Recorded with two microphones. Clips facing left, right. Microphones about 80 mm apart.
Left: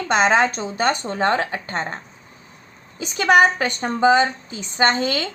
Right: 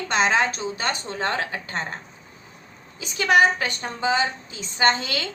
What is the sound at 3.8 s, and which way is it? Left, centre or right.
A woman's voice, left.